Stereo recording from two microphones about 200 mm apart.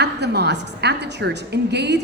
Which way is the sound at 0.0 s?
55° right (ahead or behind).